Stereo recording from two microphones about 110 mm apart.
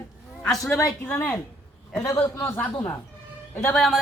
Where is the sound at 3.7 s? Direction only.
Centre (ahead or behind).